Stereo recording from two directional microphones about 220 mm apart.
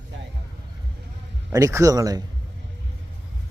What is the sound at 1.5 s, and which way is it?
Speech, 15° right (ahead or behind).